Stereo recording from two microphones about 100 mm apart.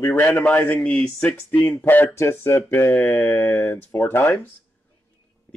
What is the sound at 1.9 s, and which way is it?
Speech, 20° left (ahead or behind).